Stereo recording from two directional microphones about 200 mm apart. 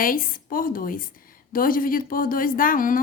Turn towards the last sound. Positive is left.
turn(degrees=45)  # may be behind; listen again after turning